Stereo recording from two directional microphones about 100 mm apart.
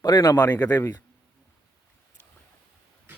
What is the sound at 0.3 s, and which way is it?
Speech, 15° left (ahead or behind).